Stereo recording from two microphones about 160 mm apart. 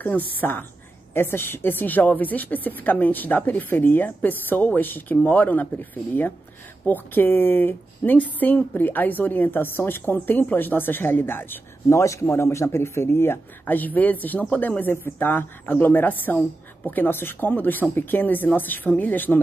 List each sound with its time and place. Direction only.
0.0 s speech: 10° left (ahead or behind)